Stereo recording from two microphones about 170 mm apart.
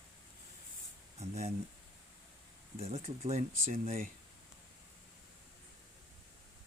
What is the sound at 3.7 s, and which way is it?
Speech, 50° right (ahead or behind).